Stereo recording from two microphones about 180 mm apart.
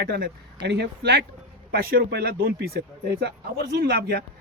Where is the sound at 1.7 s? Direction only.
55° right (ahead or behind).